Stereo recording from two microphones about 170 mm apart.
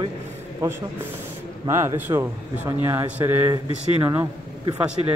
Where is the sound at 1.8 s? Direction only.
15° right (ahead or behind).